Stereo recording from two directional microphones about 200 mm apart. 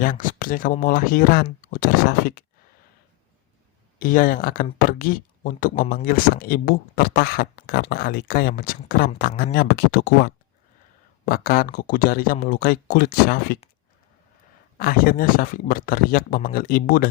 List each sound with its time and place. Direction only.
0.0 s speech: 45° left (ahead or behind)
3.9 s speech: 45° left (ahead or behind)
14.8 s speech: 45° left (ahead or behind)